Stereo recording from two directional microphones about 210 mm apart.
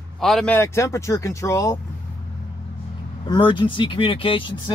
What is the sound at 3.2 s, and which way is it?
Speech, 20° left (ahead or behind).